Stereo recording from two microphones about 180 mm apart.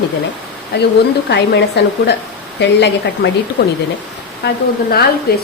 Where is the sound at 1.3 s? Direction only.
70° left (ahead or behind).